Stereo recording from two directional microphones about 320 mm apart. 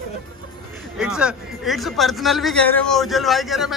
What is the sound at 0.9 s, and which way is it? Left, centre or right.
A man's voice, centre.